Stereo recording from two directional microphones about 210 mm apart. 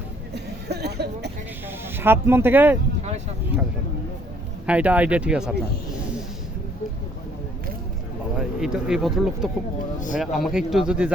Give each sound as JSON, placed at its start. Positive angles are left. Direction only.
{"t": 0.3, "sound": "a sound", "side_deg": -50}
{"t": 1.6, "sound": "speech", "side_deg": -10}
{"t": 4.6, "sound": "speech", "side_deg": -5}
{"t": 8.4, "sound": "speech", "side_deg": -5}